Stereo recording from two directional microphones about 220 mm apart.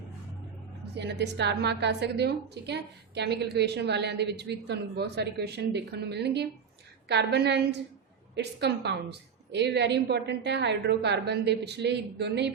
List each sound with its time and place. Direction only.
0.9 s a woman's voice: 50° right (ahead or behind)